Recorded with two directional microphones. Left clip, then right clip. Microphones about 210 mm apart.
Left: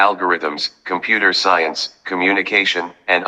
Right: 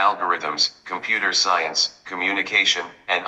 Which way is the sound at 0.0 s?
40° left (ahead or behind).